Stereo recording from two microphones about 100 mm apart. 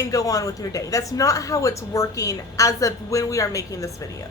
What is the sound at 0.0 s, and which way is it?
A woman's voice, 35° left (ahead or behind).